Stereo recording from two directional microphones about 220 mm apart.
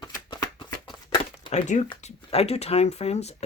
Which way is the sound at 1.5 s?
30° left (ahead or behind).